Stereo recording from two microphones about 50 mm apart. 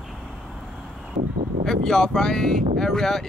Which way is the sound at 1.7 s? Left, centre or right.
Centre.